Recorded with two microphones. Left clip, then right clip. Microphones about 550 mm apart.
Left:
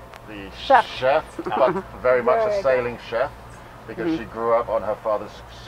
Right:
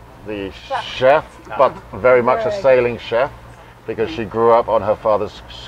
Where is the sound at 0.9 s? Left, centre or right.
Right.